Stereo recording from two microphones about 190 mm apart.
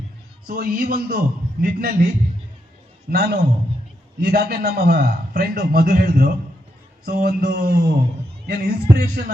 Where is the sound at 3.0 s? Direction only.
55° right (ahead or behind).